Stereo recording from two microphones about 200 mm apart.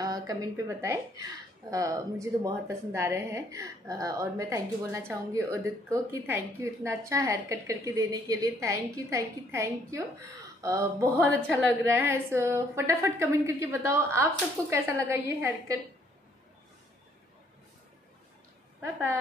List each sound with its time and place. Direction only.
0.0 s a woman's voice: 15° right (ahead or behind)